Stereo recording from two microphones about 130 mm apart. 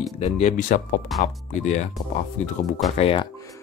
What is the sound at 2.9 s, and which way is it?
Speech, 45° left (ahead or behind).